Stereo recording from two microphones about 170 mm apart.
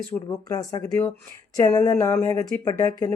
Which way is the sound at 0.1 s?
20° left (ahead or behind).